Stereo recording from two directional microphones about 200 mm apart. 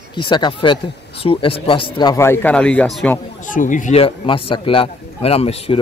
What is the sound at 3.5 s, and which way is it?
A man's voice, 40° left (ahead or behind).